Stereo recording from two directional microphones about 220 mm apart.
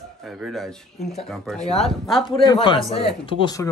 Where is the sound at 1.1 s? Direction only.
Centre (ahead or behind).